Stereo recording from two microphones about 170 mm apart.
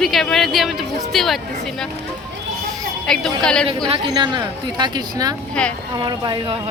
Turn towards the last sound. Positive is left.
turn(degrees=-25)  # may be behind; listen again after turning